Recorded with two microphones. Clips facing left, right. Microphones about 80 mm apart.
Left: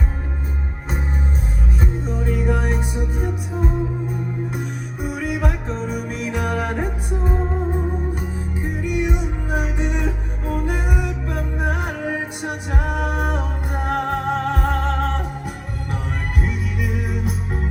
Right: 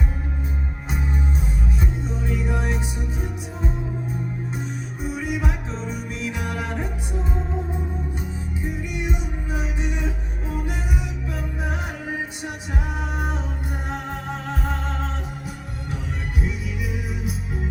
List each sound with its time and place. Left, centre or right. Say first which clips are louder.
1.8 s music: left 3 dB; left
5.0 s music: left 3 dB; left
16.4 s music: left 3 dB; left